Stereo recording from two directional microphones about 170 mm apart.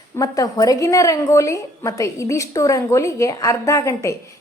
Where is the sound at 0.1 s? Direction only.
20° left (ahead or behind).